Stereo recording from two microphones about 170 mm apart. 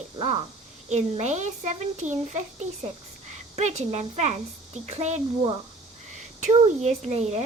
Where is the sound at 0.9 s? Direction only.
40° right (ahead or behind).